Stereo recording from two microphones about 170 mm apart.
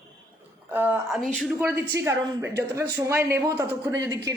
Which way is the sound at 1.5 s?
10° right (ahead or behind).